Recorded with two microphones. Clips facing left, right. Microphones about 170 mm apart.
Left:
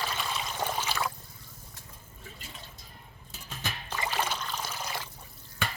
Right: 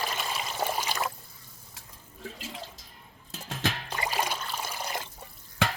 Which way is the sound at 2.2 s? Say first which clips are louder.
Right 9 dB; 90° right.